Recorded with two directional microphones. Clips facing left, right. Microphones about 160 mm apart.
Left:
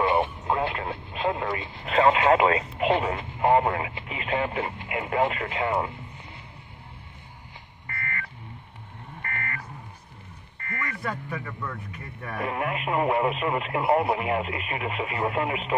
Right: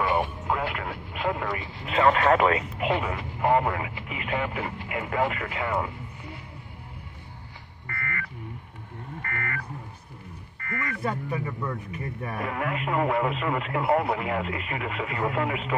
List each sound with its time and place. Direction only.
0.0 s vehicle: 25° left (ahead or behind)
2.0 s speech: 20° left (ahead or behind)
7.8 s buzzer: 25° left (ahead or behind)
9.2 s a sound: 25° left (ahead or behind)
10.6 s a sound: 25° left (ahead or behind)
11.0 s speech: 20° right (ahead or behind)
12.4 s speech: 20° left (ahead or behind)